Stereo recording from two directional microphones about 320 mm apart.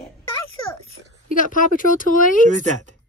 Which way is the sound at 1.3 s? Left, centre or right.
Left.